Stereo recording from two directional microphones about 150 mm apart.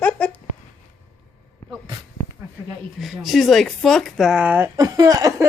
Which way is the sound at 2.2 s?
20° left (ahead or behind).